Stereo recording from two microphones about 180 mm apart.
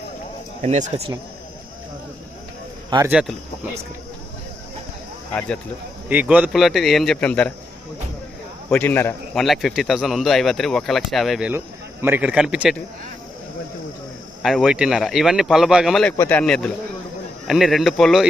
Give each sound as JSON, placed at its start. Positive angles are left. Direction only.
{"t": 0.6, "sound": "speech", "side_deg": -40}
{"t": 3.1, "sound": "speech", "side_deg": -5}
{"t": 5.3, "sound": "a man's voice", "side_deg": 10}
{"t": 6.1, "sound": "speech", "side_deg": -10}
{"t": 8.7, "sound": "a man's voice", "side_deg": 10}
{"t": 9.4, "sound": "speech", "side_deg": 0}
{"t": 14.4, "sound": "speech", "side_deg": 0}
{"t": 16.1, "sound": "a man's voice", "side_deg": 15}
{"t": 16.4, "sound": "speech", "side_deg": 5}